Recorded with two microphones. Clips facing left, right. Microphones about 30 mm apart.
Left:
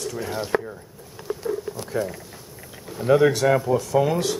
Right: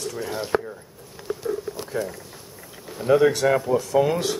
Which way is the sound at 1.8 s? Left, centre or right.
Centre.